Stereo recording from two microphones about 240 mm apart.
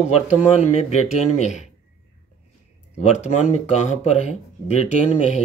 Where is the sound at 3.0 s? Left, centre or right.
Left.